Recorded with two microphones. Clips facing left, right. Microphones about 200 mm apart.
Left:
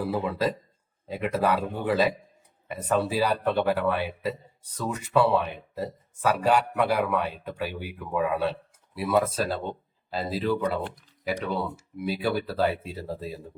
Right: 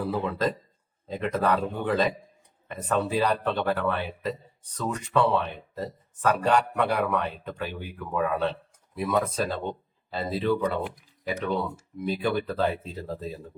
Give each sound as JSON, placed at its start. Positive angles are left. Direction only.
{"t": 0.0, "sound": "speech", "side_deg": 10}
{"t": 11.9, "sound": "speech", "side_deg": 10}